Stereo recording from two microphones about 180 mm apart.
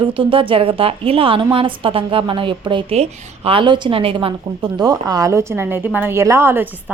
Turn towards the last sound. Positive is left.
turn(degrees=-15)  # may be behind; listen again after turning